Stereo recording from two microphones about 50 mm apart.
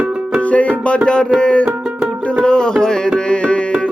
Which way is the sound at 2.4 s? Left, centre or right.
Centre.